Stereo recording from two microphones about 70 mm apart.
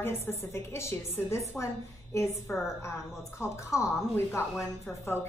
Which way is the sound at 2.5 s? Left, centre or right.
Left.